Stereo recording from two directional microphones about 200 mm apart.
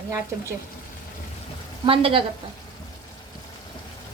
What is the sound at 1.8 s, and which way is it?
Speech, 25° right (ahead or behind).